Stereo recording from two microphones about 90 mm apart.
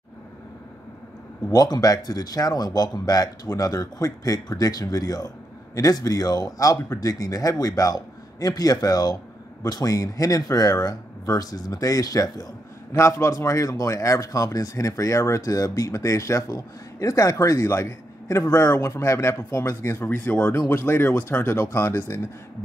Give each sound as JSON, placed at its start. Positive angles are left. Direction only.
{"t": 1.5, "sound": "a man's voice", "side_deg": 45}